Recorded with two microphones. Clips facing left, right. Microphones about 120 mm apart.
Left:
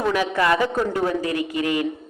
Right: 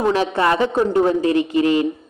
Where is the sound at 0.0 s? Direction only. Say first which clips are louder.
Right 3 dB; 30° right (ahead or behind).